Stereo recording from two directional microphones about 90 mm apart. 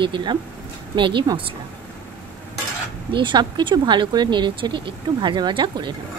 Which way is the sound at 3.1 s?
60° right (ahead or behind).